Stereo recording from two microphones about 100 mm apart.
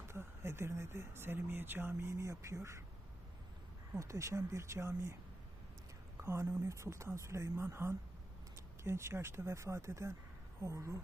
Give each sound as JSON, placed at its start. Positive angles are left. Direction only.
{"t": 0.1, "sound": "speech", "side_deg": -25}
{"t": 3.9, "sound": "speech", "side_deg": -30}
{"t": 6.1, "sound": "speech", "side_deg": -25}